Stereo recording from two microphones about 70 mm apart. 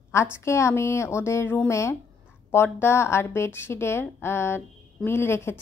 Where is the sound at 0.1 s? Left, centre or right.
Left.